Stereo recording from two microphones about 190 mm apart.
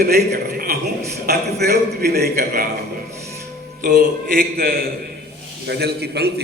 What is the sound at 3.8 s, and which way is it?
A man's voice, 50° right (ahead or behind).